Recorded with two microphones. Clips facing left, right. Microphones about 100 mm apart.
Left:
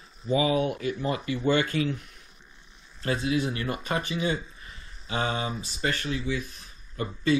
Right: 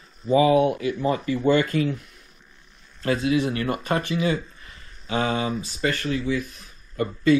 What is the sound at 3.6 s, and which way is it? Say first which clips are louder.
Speech: right 5 dB; 45° right (ahead or behind).